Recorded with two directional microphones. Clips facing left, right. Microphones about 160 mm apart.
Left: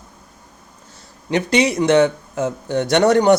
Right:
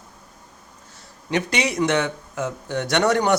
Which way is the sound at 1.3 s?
30° left (ahead or behind).